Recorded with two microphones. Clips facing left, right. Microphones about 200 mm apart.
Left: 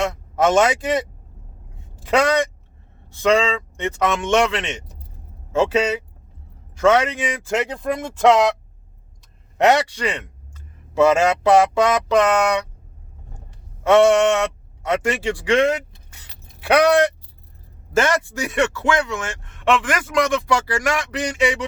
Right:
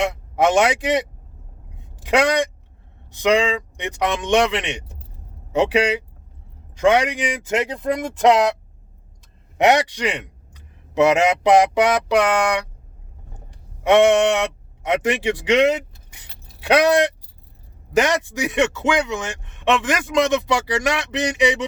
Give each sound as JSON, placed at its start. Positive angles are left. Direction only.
{"t": 0.1, "sound": "speech", "side_deg": -15}
{"t": 9.6, "sound": "a man's voice", "side_deg": -15}
{"t": 13.8, "sound": "a man's voice", "side_deg": -15}